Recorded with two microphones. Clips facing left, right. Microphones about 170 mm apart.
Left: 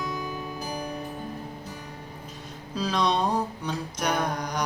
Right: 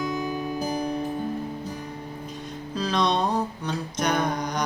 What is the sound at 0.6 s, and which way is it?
Music, 30° right (ahead or behind).